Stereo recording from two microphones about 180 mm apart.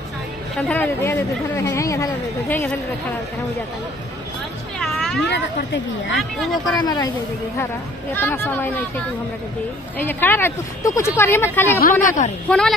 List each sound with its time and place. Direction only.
0.6 s speech: 10° left (ahead or behind)
4.7 s cat: centre (ahead or behind)
5.3 s speech: 75° left (ahead or behind)
6.1 s speech: centre (ahead or behind)
6.8 s speech: 20° left (ahead or behind)
8.1 s speech: 10° left (ahead or behind)
9.9 s speech: 10° left (ahead or behind)
12.0 s a woman's voice: 45° left (ahead or behind)
12.4 s speech: 5° left (ahead or behind)